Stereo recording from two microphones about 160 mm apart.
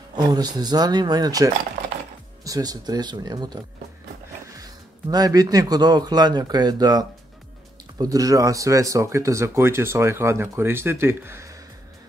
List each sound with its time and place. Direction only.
0.1 s a man's voice: 25° right (ahead or behind)